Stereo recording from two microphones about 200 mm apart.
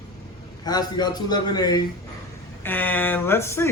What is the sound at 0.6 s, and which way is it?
A man's voice, 20° left (ahead or behind).